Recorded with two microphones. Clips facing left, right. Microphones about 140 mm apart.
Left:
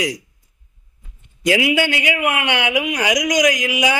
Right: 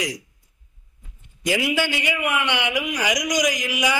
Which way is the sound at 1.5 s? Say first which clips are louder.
Left 5 dB; 90° left.